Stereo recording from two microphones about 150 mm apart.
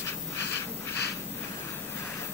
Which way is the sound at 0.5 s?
90° left.